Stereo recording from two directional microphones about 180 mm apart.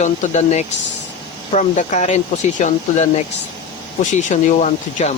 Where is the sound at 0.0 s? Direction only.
40° left (ahead or behind).